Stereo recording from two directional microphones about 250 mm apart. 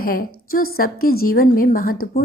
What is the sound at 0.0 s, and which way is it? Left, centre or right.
A woman's voice, left.